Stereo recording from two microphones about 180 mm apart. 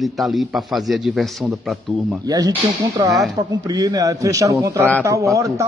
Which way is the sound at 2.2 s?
20° right (ahead or behind).